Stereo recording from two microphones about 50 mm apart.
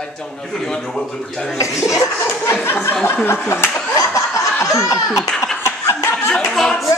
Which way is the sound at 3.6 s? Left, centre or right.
Left.